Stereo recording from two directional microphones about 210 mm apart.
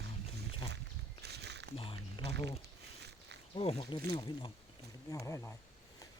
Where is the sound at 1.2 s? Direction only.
50° right (ahead or behind).